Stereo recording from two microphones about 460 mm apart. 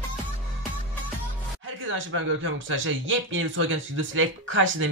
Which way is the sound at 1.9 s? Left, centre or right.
Right.